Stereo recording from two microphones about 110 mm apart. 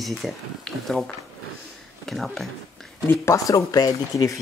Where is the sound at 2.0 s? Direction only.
Centre (ahead or behind).